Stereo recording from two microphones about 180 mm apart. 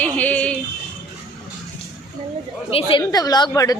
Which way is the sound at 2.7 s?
25° left (ahead or behind).